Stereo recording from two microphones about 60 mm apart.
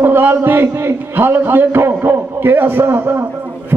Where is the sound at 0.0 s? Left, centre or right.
Right.